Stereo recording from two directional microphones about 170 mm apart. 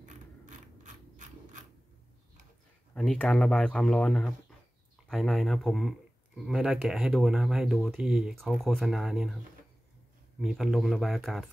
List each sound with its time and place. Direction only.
0.8 s mechanisms: 50° right (ahead or behind)
2.9 s speech: 5° left (ahead or behind)
10.4 s speech: centre (ahead or behind)